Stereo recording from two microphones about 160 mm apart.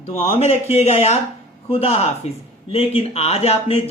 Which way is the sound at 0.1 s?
40° left (ahead or behind).